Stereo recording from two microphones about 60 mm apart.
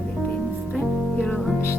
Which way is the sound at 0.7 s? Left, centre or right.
Centre.